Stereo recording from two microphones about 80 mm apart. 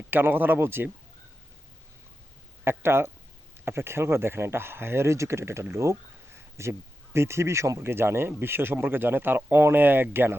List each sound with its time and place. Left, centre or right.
0.1 s speech: right
2.6 s speech: right